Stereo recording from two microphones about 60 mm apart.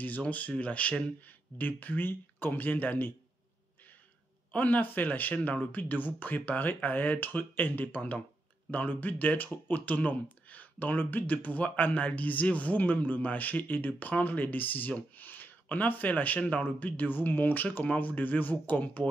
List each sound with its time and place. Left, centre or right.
0.0 s speech: left
4.5 s speech: left